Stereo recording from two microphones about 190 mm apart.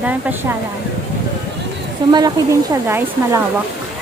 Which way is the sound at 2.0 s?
25° right (ahead or behind).